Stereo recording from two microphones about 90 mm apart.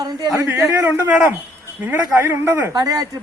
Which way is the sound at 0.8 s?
20° right (ahead or behind).